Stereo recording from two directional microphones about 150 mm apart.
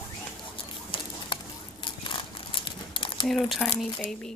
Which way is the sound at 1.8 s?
35° left (ahead or behind).